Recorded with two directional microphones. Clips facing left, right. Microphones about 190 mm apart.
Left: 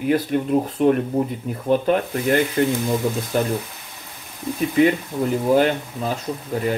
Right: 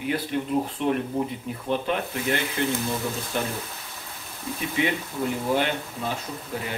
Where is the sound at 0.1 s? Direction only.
45° left (ahead or behind).